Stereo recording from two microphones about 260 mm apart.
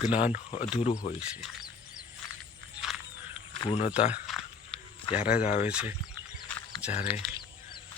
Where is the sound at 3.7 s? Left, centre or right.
Left.